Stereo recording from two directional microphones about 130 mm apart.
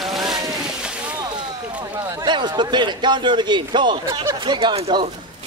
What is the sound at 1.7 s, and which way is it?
A man's voice, 35° right (ahead or behind).